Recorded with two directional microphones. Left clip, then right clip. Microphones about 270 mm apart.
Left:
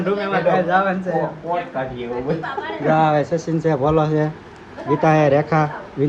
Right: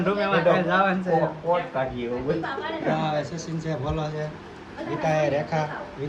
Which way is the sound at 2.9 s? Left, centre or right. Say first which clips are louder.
Left 11 dB; centre.